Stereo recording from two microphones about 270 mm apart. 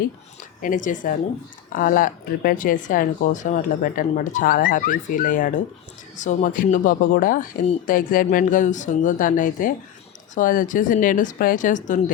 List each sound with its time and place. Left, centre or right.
0.6 s speech: left